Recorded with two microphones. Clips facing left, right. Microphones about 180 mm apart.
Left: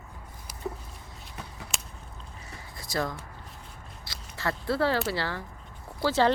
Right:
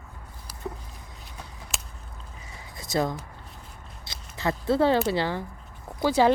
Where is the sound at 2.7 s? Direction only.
20° right (ahead or behind).